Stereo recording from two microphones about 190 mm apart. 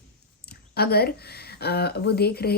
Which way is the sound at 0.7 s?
55° left (ahead or behind).